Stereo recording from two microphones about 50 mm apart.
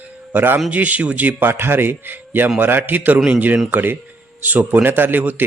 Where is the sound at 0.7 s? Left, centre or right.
Right.